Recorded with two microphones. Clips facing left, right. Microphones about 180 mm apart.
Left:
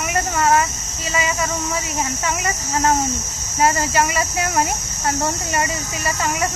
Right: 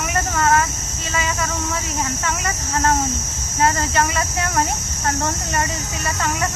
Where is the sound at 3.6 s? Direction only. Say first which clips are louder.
Left 1 dB; 5° left (ahead or behind).